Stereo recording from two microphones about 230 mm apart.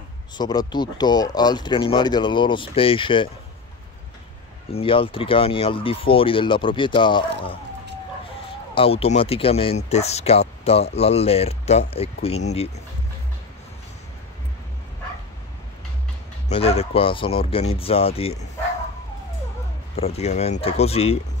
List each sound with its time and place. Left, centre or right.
0.4 s speech: centre
4.6 s speech: left
8.7 s speech: left
16.4 s speech: left
20.0 s speech: left